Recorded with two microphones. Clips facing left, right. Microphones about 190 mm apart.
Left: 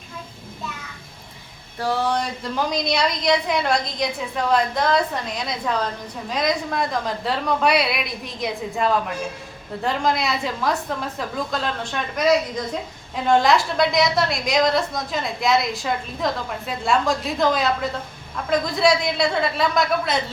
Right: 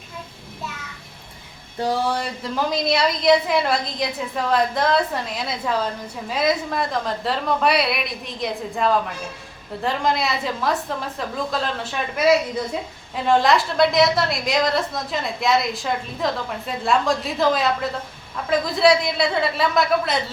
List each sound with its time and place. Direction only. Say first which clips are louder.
1.8 s a woman's voice: even; 10° right (ahead or behind)